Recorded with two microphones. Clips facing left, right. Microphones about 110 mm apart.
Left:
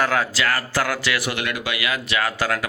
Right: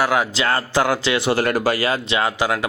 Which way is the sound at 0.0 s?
15° right (ahead or behind).